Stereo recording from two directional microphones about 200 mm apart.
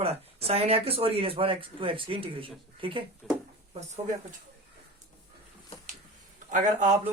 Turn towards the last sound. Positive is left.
turn(degrees=-40)  # may be behind; listen again after turning